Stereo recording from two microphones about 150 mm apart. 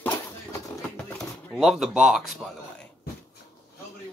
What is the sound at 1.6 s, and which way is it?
Speech, centre (ahead or behind).